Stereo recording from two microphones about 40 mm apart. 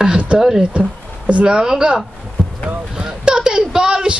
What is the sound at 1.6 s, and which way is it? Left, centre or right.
Speech, centre.